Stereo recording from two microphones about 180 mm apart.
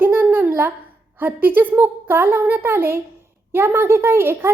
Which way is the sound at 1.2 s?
10° right (ahead or behind).